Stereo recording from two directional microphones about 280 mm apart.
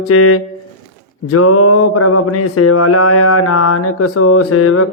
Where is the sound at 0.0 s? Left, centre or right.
Left.